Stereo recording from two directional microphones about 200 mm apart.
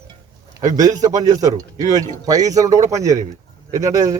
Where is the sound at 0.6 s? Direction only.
20° right (ahead or behind).